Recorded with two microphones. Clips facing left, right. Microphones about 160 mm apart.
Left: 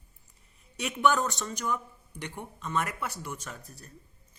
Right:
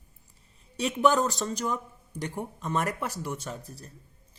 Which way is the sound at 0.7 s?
30° right (ahead or behind).